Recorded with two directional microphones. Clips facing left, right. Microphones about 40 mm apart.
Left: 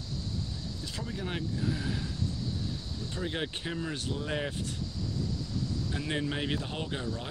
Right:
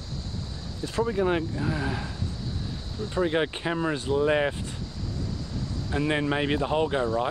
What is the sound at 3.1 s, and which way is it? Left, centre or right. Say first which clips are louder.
Speech: right 10 dB; right.